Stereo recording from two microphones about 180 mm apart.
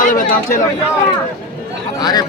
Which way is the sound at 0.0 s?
45° left (ahead or behind).